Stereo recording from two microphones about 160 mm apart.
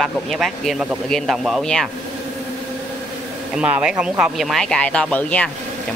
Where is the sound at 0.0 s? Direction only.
Centre (ahead or behind).